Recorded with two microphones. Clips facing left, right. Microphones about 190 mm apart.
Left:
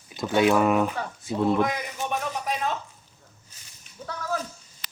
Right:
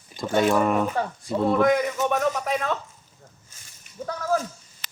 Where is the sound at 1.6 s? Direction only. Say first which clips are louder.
Right 9 dB; 50° right (ahead or behind).